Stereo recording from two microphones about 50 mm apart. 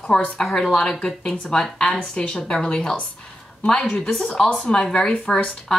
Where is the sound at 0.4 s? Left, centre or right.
Centre.